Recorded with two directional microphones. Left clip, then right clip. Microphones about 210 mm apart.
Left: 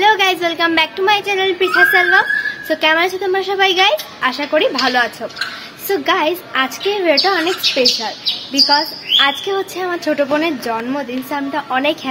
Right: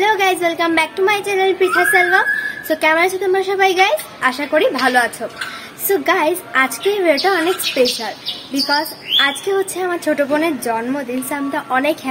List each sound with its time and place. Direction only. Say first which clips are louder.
0.0 s a woman's voice: left 2 dB; 10° right (ahead or behind)
7.7 s a woman's voice: left 1 dB; centre (ahead or behind)
8.6 s a woman's voice: even; 10° right (ahead or behind)